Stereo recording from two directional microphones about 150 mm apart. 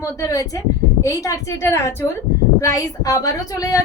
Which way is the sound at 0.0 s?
20° left (ahead or behind).